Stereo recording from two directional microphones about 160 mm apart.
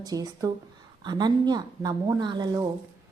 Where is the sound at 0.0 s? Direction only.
25° right (ahead or behind).